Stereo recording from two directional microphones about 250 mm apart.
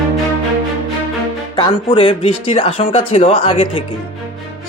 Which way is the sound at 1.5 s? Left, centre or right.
Centre.